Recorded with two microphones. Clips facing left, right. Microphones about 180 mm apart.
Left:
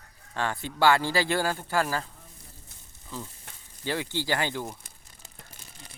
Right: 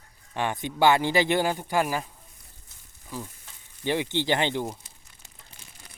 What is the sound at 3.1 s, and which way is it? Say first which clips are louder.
Speech: right 2 dB; 10° right (ahead or behind).